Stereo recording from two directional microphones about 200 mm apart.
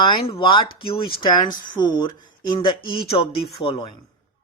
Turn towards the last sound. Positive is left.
turn(degrees=25)  # may be behind; listen again after turning